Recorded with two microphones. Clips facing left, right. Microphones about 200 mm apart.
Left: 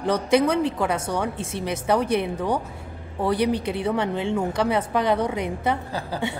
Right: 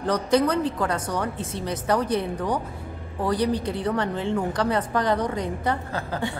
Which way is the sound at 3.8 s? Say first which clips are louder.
Left 1 dB; 10° left (ahead or behind).